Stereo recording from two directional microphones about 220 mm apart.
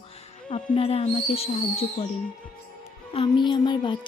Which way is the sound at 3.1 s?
20° left (ahead or behind).